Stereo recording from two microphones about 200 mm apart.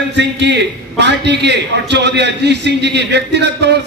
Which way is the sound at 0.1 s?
60° right (ahead or behind).